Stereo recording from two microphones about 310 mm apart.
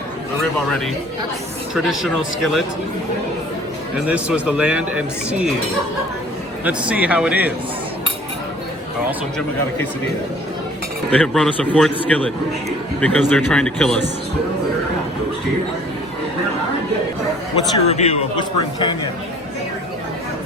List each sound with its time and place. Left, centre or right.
1.7 s speech: centre
3.9 s speech: centre
6.7 s speech: centre
11.1 s speech: centre
17.8 s speech: centre